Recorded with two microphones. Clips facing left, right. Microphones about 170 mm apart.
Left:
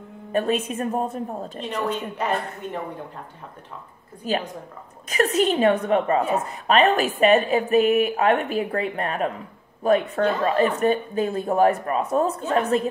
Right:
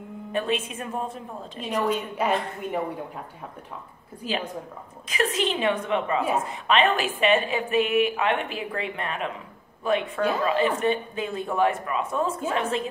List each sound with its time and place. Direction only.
0.3 s a woman's voice: 40° left (ahead or behind)
1.6 s a woman's voice: 10° right (ahead or behind)
4.2 s a woman's voice: 45° left (ahead or behind)